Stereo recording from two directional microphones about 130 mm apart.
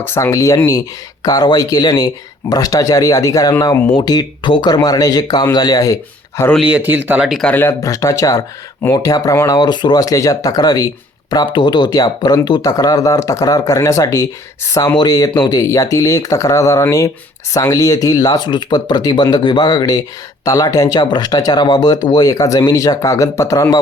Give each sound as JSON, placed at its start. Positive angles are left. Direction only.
{"t": 0.0, "sound": "speech", "side_deg": 20}
{"t": 6.6, "sound": "speech", "side_deg": -10}
{"t": 7.4, "sound": "speech", "side_deg": 15}